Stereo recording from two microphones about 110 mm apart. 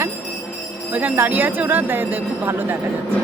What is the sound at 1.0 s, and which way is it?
Speech, 15° right (ahead or behind).